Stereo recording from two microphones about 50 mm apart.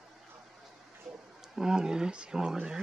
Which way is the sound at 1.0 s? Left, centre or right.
Centre.